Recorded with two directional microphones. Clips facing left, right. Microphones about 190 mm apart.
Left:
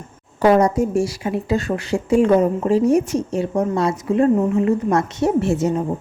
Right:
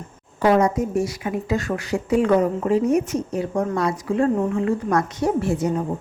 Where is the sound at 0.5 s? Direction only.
35° left (ahead or behind).